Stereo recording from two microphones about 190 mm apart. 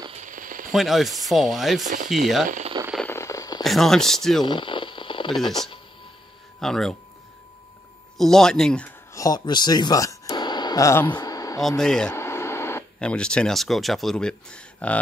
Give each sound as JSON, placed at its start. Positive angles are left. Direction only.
{"t": 0.1, "sound": "a sound", "side_deg": -40}
{"t": 0.7, "sound": "speech", "side_deg": 0}
{"t": 2.4, "sound": "speech", "side_deg": -40}
{"t": 3.1, "sound": "a sound", "side_deg": 15}
{"t": 3.6, "sound": "speech", "side_deg": 0}
{"t": 4.5, "sound": "radio", "side_deg": 25}
{"t": 5.5, "sound": "speech", "side_deg": 20}
{"t": 6.6, "sound": "speech", "side_deg": 0}
{"t": 8.2, "sound": "speech", "side_deg": 5}
{"t": 9.1, "sound": "a sound", "side_deg": 20}
{"t": 11.6, "sound": "speech", "side_deg": 0}